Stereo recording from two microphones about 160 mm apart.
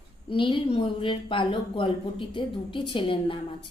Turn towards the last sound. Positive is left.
turn(degrees=30)  # may be behind; listen again after turning